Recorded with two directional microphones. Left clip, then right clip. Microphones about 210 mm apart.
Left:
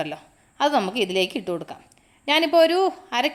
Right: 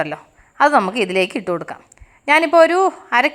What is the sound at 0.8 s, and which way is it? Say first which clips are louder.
Speech: right 5 dB; 10° right (ahead or behind).